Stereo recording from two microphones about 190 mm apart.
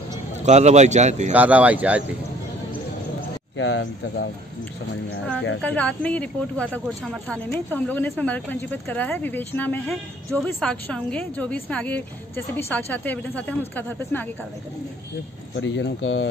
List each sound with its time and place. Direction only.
0.4 s a man's voice: 35° right (ahead or behind)
1.3 s speech: 10° right (ahead or behind)
3.5 s speech: 75° left (ahead or behind)
5.6 s speech: 5° left (ahead or behind)
15.5 s speech: 70° left (ahead or behind)